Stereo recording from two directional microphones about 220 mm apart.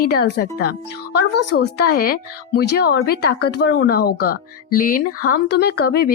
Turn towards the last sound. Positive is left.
turn(degrees=45)  # may be behind; listen again after turning